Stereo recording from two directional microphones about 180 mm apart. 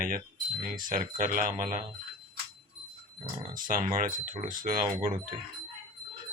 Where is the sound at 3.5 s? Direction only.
50° right (ahead or behind).